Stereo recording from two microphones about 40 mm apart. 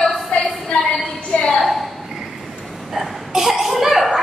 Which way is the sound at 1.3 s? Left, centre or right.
Left.